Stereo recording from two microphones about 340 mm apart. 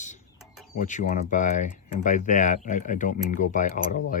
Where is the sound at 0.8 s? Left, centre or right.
Left.